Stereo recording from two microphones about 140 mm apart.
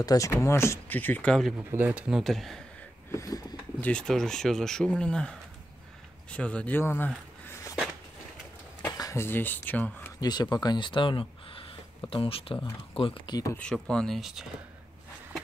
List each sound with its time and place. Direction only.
0.0 s speech: 25° left (ahead or behind); by 1.5 s 5° left (ahead or behind)
1.6 s speech: 15° right (ahead or behind); by 2.6 s centre (ahead or behind)
3.1 s a sound: 25° left (ahead or behind)
3.8 s speech: 5° left (ahead or behind)
8.8 s speech: 25° left (ahead or behind)
10.2 s speech: 30° left (ahead or behind)
13.6 s speech: 5° left (ahead or behind)